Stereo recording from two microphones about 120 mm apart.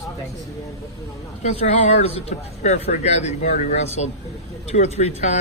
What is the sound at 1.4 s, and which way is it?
Speech, 70° left (ahead or behind).